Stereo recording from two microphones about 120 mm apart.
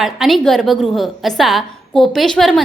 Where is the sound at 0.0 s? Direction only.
Centre (ahead or behind).